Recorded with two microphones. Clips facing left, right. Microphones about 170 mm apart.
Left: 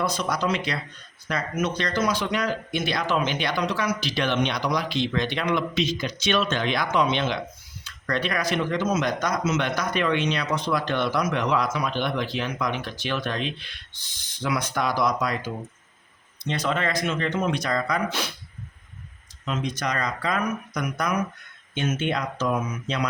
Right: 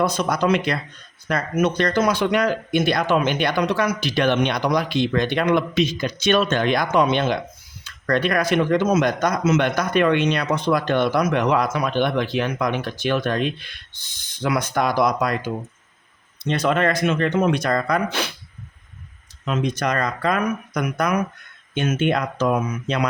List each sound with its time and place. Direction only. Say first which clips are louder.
0.0 s speech: right 5 dB; 55° right (ahead or behind)
19.5 s speech: right 5 dB; 55° right (ahead or behind)